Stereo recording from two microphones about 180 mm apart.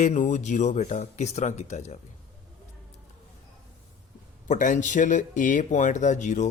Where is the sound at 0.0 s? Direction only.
45° left (ahead or behind).